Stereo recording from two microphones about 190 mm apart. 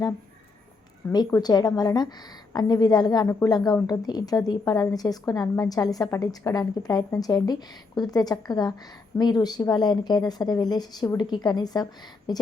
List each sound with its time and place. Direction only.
1.1 s a woman's voice: 20° left (ahead or behind)